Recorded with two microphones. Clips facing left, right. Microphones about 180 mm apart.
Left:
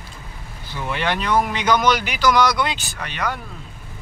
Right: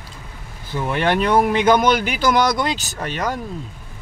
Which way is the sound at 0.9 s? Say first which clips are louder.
Right 4 dB; 50° right (ahead or behind).